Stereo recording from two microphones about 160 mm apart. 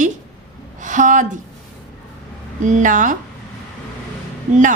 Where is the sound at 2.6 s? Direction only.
50° right (ahead or behind).